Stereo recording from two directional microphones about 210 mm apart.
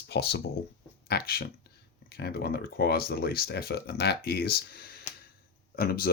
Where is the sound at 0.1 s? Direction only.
50° left (ahead or behind).